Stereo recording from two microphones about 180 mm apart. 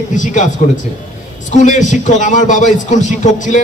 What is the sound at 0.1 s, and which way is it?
A man's voice, 45° left (ahead or behind).